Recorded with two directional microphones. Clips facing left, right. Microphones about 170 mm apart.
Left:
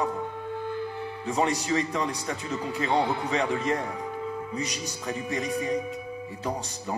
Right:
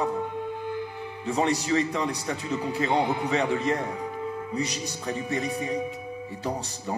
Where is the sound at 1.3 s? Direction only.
35° right (ahead or behind).